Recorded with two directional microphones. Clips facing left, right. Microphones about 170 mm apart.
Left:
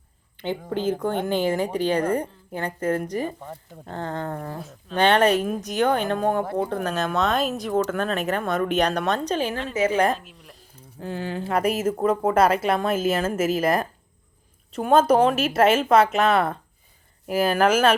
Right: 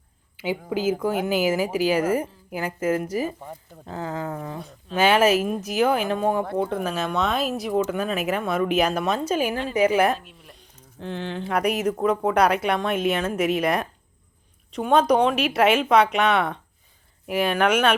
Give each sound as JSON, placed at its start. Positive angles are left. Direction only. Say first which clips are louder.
{"t": 0.3, "sound": "a woman's voice", "louder": "right 1 dB", "side_deg": -5}